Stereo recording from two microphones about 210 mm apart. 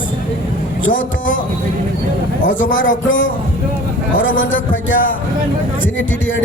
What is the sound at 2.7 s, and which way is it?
A man's voice, 65° left (ahead or behind).